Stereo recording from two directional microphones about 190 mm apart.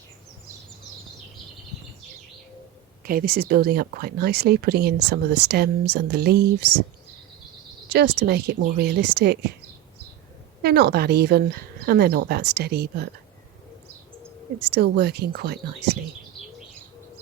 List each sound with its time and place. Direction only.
3.0 s speech: 50° right (ahead or behind)
7.9 s speech: 60° right (ahead or behind)
10.6 s speech: 55° right (ahead or behind)
14.6 s speech: 60° right (ahead or behind)